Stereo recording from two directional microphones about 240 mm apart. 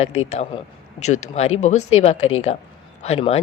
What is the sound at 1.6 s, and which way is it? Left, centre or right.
Speech, left.